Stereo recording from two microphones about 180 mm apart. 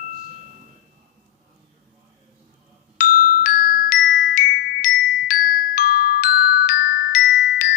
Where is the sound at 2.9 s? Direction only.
45° left (ahead or behind).